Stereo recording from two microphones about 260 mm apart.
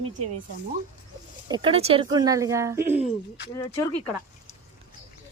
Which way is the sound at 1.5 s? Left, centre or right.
Centre.